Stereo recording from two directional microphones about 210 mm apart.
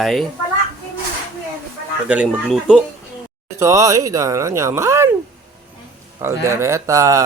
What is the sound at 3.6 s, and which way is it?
Speech, 15° right (ahead or behind).